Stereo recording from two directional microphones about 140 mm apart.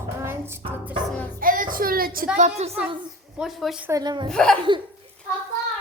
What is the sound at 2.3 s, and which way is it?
Speech, 55° right (ahead or behind).